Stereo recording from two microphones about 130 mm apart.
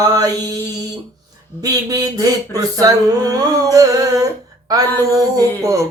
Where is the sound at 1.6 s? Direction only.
30° right (ahead or behind).